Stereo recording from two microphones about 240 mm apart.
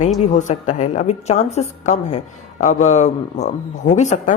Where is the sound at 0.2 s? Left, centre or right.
Left.